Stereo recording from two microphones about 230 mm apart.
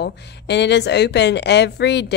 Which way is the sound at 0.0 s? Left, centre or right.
Left.